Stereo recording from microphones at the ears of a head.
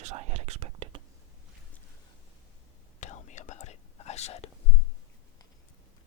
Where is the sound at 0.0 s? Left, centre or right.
Right.